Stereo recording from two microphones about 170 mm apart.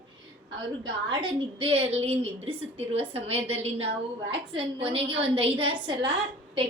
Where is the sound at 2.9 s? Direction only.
35° right (ahead or behind).